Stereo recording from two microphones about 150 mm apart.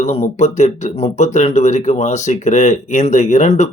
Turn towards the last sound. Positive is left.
turn(degrees=50)  # may be behind; listen again after turning